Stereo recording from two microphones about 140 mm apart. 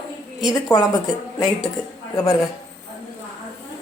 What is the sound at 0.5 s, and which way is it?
Speech, 30° left (ahead or behind).